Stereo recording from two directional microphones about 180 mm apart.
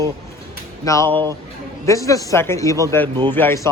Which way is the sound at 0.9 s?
15° left (ahead or behind).